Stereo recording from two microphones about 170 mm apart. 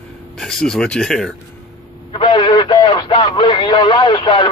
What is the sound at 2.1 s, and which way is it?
Speech, 30° left (ahead or behind).